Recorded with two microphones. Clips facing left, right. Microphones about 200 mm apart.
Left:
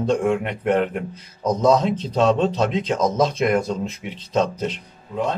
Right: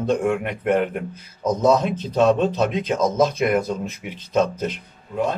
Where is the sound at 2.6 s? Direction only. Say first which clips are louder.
Even; 10° right (ahead or behind).